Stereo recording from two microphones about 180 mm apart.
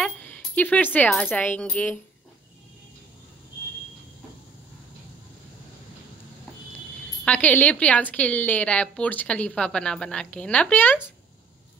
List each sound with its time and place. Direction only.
0.0 s a sound: 5° left (ahead or behind)
1.3 s a woman's voice: 10° left (ahead or behind)
7.2 s a woman's voice: 10° left (ahead or behind)